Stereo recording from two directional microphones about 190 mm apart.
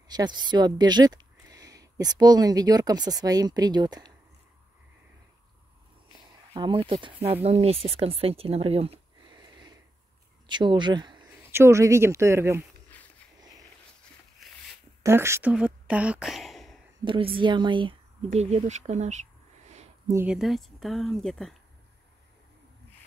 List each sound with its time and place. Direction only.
0.1 s speech: 20° right (ahead or behind)
6.5 s speech: 25° right (ahead or behind)
10.4 s speech: 25° right (ahead or behind)
15.0 s speech: 15° right (ahead or behind)
17.0 s speech: 25° right (ahead or behind)
20.1 s speech: 10° right (ahead or behind)
20.3 s speech: centre (ahead or behind)